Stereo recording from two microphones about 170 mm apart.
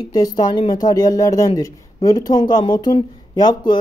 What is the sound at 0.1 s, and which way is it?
Speech, 25° left (ahead or behind).